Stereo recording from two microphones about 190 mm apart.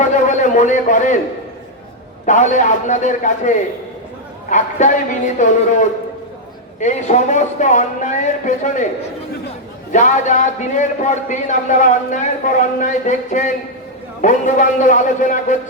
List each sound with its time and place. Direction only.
0.0 s a sound: 40° left (ahead or behind)
2.2 s a man's voice: 40° left (ahead or behind)
9.9 s a man's voice: 40° left (ahead or behind)